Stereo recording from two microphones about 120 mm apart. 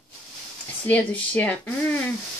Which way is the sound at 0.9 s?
10° left (ahead or behind).